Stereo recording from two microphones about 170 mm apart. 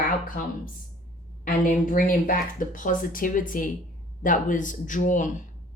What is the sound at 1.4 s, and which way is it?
Speech, 50° left (ahead or behind).